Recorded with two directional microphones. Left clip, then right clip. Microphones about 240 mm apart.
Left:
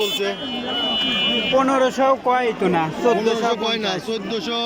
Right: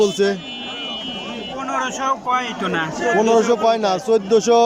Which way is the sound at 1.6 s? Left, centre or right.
Left.